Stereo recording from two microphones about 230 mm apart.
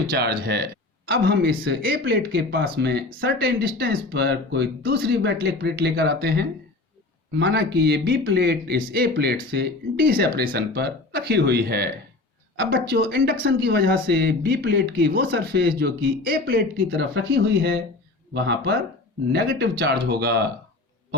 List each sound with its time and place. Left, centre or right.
0.1 s speech: right
12.9 s speech: right